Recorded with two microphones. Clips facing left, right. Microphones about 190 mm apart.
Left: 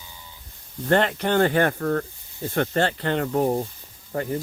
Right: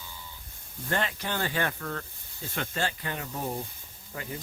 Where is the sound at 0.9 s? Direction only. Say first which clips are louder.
Left 10 dB; 60° left (ahead or behind).